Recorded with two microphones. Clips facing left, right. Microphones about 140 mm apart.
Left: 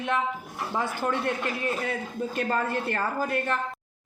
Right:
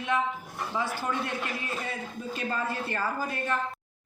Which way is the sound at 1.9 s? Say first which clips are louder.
Left 5 dB; 55° left (ahead or behind).